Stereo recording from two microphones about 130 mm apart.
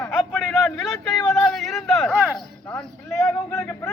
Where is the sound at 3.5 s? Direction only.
20° left (ahead or behind).